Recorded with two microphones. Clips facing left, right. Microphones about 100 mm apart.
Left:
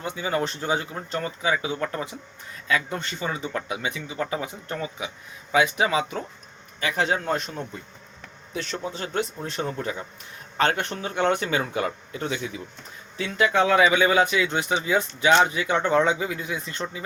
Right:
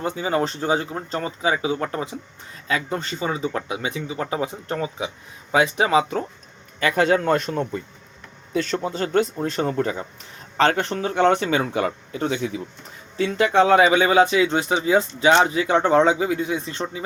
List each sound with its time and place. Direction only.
0.0 s speech: 35° right (ahead or behind)
6.7 s speech: 55° right (ahead or behind)
10.6 s speech: 35° right (ahead or behind)